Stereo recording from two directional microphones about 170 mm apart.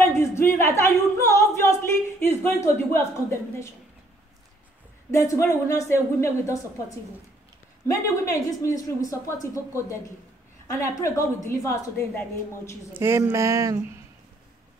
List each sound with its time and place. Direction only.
0.0 s speech: 15° left (ahead or behind)
5.1 s speech: 20° left (ahead or behind)
7.8 s a woman's voice: 20° left (ahead or behind)
11.0 s speech: 20° left (ahead or behind)
12.9 s speech: 15° right (ahead or behind)